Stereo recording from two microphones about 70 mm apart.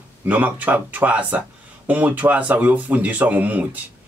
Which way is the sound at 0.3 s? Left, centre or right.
Right.